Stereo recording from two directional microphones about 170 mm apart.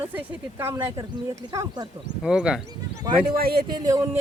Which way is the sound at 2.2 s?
5° right (ahead or behind).